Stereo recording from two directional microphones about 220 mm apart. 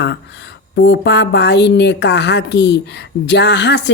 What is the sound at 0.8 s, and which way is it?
A woman's voice, 50° left (ahead or behind).